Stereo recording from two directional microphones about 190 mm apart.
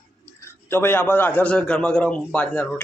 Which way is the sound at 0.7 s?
10° left (ahead or behind).